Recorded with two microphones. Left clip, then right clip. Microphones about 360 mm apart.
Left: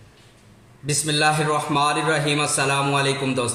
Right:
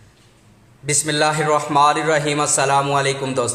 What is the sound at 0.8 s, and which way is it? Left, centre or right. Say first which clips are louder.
A man's voice: right 2 dB; right.